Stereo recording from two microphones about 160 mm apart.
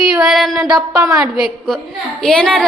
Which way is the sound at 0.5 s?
20° right (ahead or behind).